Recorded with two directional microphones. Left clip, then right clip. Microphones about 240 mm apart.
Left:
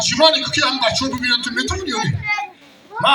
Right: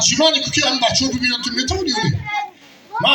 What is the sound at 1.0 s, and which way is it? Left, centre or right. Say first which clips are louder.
Speech: left 1 dB; left.